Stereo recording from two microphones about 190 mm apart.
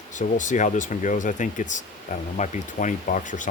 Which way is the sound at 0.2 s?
40° left (ahead or behind).